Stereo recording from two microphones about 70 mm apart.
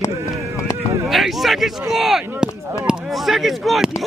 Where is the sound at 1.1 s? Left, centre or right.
Centre.